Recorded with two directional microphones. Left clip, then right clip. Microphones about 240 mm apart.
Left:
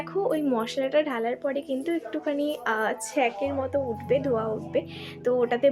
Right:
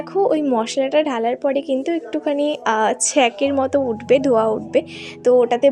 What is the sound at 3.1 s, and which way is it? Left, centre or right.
A woman's voice, right.